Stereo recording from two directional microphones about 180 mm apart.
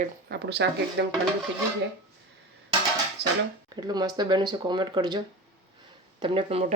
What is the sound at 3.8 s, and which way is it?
Speech, 20° right (ahead or behind).